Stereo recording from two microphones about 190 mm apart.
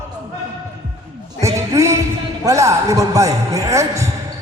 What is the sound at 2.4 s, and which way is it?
A man's voice, 15° right (ahead or behind).